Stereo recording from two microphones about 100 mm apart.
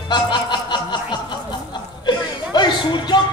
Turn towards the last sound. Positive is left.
turn(degrees=50)  # may be behind; listen again after turning